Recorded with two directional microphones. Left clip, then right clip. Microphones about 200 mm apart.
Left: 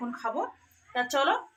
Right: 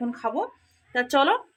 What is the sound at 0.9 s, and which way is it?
Speech, 60° right (ahead or behind).